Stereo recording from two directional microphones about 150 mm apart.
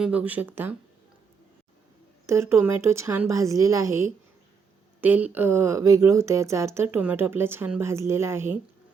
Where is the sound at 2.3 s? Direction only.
20° right (ahead or behind).